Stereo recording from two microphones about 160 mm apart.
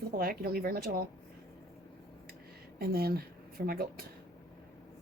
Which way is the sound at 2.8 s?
75° right (ahead or behind).